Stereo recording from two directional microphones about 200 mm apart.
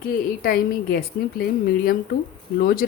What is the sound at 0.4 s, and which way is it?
A woman's voice, 45° left (ahead or behind).